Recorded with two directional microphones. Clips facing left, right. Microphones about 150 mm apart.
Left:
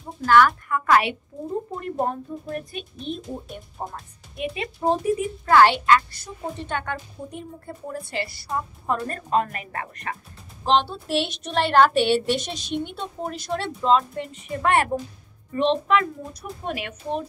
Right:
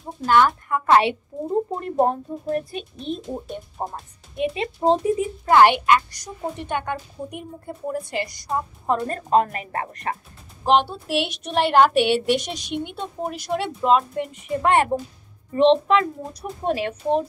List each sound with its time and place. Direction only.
0.2 s a woman's voice: 25° right (ahead or behind)
10.6 s a woman's voice: 10° right (ahead or behind); by 17.2 s 30° right (ahead or behind)